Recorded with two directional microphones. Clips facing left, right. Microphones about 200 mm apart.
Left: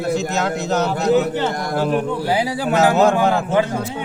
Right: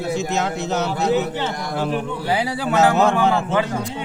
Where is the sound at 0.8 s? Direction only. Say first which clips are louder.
Left 4 dB; 45° left (ahead or behind).